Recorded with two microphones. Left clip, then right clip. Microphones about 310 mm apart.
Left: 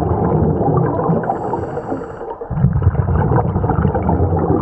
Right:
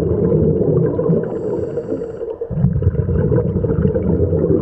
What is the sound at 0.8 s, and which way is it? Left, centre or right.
Whale vocalization, centre.